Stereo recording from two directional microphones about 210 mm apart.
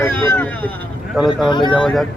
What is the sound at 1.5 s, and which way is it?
Speech, 20° left (ahead or behind).